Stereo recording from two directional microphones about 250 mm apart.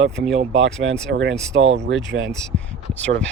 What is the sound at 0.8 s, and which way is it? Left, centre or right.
Speech, right.